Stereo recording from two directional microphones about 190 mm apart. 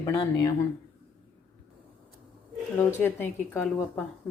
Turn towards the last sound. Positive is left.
turn(degrees=10)  # may be behind; listen again after turning